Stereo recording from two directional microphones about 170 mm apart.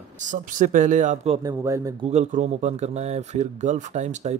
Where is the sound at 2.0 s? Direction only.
40° right (ahead or behind).